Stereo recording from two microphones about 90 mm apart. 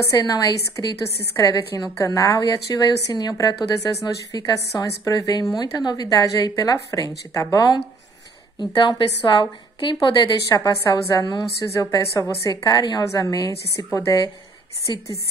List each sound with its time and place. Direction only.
0.0 s a woman's voice: 40° left (ahead or behind)
8.5 s a woman's voice: 55° left (ahead or behind)
10.0 s a woman's voice: 40° left (ahead or behind)
14.9 s a woman's voice: 60° left (ahead or behind)